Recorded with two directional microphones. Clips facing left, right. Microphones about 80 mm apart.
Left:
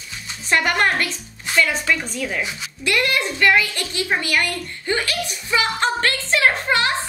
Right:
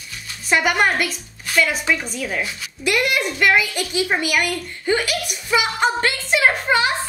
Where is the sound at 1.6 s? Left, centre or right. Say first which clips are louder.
Even; centre.